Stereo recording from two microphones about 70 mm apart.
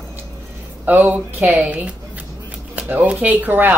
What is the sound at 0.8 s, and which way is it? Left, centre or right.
Speech, right.